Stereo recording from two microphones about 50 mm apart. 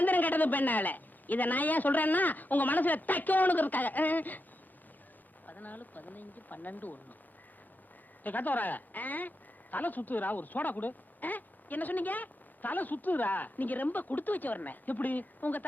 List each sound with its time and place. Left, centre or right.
0.0 s speech: left
5.5 s speech: left
8.2 s speech: left